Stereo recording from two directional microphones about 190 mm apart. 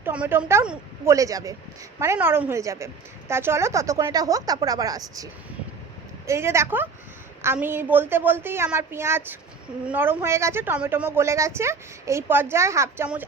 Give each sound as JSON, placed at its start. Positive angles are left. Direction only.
{"t": 0.0, "sound": "a woman's voice", "side_deg": -10}